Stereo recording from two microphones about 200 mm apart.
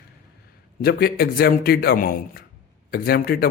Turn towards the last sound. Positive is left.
turn(degrees=50)  # may be behind; listen again after turning